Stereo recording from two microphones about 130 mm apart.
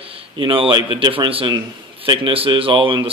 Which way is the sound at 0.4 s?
40° right (ahead or behind).